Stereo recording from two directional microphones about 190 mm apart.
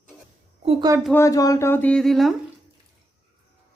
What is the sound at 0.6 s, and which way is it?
Speech, 30° right (ahead or behind).